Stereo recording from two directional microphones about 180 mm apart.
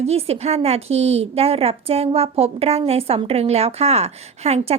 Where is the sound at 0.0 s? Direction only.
35° right (ahead or behind).